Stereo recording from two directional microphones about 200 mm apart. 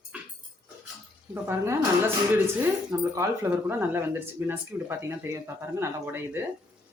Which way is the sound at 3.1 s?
10° right (ahead or behind).